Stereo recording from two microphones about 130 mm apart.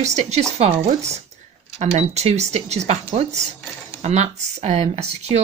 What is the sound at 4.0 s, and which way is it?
Speech, 60° right (ahead or behind).